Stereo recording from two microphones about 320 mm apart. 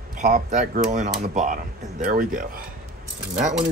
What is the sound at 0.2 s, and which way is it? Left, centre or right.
Speech, right.